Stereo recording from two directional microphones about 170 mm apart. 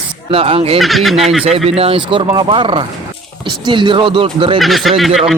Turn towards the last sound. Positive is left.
turn(degrees=0)  # may be behind; listen again after turning